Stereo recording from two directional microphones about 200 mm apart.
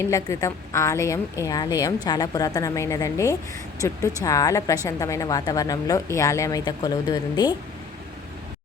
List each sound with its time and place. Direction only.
0.0 s a woman's voice: 15° left (ahead or behind)